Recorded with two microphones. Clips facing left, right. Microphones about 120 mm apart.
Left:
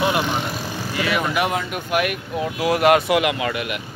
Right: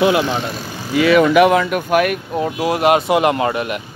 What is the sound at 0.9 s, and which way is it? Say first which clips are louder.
Speech: right 11 dB; 90° right.